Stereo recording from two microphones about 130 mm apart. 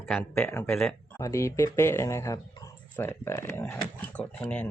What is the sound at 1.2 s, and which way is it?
Speech, 20° left (ahead or behind).